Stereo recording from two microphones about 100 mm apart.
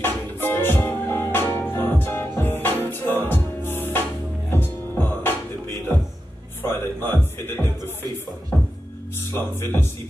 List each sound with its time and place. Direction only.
0.0 s music: 20° left (ahead or behind)
6.6 s music: 25° left (ahead or behind)
9.3 s speech: 25° left (ahead or behind)